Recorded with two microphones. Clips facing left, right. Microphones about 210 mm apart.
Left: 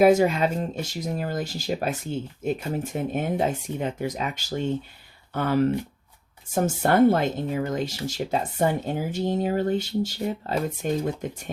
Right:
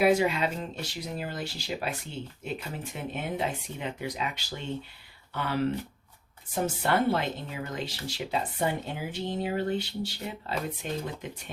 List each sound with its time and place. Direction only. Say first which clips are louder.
0.0 s speech: left 6 dB; 45° left (ahead or behind)